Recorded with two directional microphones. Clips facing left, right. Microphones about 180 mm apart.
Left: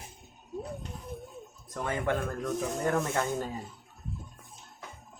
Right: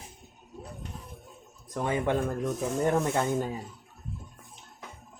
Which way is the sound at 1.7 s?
15° right (ahead or behind).